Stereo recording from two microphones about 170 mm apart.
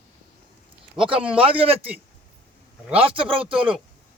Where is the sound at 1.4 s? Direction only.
30° right (ahead or behind).